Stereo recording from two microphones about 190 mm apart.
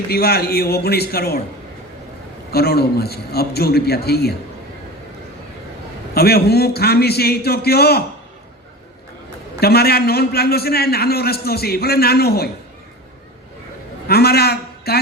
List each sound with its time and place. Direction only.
0.1 s a man's voice: 55° left (ahead or behind)
2.5 s a man's voice: 55° left (ahead or behind)
6.1 s a man's voice: 55° left (ahead or behind)
9.6 s a man's voice: 55° left (ahead or behind)
14.1 s a sound: 55° left (ahead or behind)